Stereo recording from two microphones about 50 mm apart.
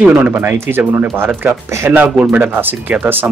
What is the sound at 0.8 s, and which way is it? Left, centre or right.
Speech, right.